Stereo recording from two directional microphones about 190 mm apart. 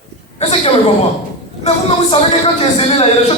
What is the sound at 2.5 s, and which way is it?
Speech, 35° left (ahead or behind).